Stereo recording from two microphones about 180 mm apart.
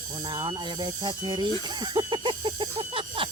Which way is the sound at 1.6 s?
25° right (ahead or behind).